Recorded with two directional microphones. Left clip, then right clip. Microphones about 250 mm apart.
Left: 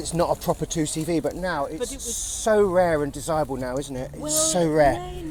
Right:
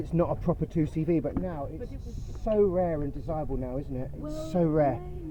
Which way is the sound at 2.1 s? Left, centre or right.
Left.